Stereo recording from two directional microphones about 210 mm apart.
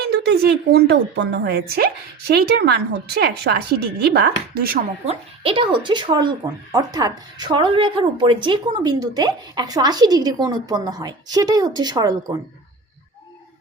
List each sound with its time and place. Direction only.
0.1 s a woman's voice: 55° right (ahead or behind)
5.0 s speech: 25° right (ahead or behind)